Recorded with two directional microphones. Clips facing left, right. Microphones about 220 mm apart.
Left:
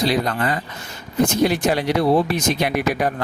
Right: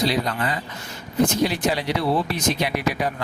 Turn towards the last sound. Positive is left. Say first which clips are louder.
# left 3 dB
turn(degrees=50)  # may be behind; listen again after turning